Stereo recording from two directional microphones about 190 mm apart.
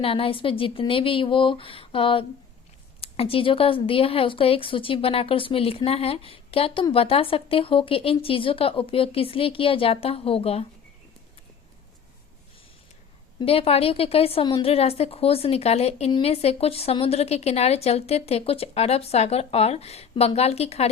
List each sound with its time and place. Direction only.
0.0 s speech: 30° left (ahead or behind)
13.4 s a woman's voice: 30° left (ahead or behind)